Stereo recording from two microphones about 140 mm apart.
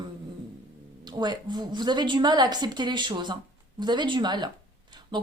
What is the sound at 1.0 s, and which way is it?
A woman's voice, 30° right (ahead or behind).